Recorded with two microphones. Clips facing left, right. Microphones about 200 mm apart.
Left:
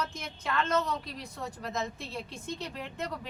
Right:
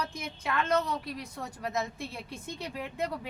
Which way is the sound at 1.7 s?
10° right (ahead or behind).